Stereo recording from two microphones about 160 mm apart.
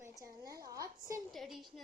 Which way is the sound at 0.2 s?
20° right (ahead or behind).